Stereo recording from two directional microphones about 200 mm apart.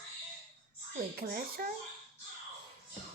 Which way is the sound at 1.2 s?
50° right (ahead or behind).